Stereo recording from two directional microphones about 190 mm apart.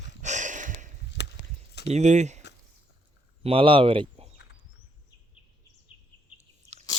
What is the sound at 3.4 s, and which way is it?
Speech, 30° right (ahead or behind).